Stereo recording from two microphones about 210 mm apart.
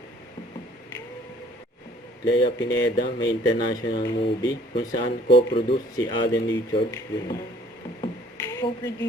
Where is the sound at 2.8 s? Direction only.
60° left (ahead or behind).